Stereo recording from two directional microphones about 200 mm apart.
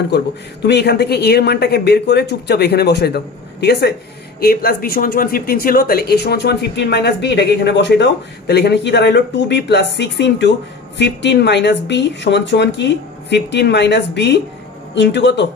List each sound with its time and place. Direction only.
0.1 s speech: 60° left (ahead or behind)
4.4 s speech: 50° left (ahead or behind)